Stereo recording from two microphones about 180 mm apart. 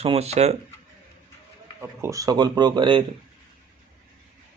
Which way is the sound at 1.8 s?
15° right (ahead or behind).